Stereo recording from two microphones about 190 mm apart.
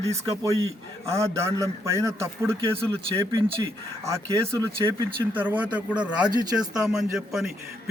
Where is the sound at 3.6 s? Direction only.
15° right (ahead or behind).